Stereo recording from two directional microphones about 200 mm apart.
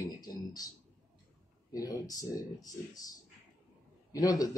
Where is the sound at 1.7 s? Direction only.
20° left (ahead or behind).